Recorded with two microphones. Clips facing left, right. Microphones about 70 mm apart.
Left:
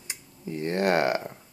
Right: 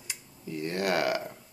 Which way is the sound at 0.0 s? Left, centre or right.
Left.